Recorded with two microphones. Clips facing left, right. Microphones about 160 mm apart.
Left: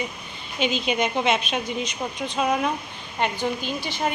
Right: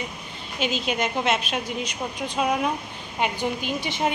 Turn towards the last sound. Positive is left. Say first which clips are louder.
# right 1 dB
turn(degrees=-20)  # may be behind; listen again after turning